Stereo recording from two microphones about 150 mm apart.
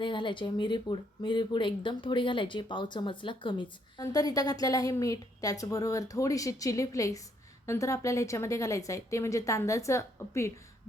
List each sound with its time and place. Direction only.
0.0 s a woman's voice: 35° left (ahead or behind)